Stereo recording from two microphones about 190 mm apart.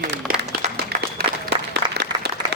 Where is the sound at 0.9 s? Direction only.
35° right (ahead or behind).